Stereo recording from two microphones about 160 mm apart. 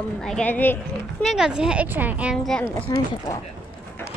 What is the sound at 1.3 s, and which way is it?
A child's voice, 5° right (ahead or behind).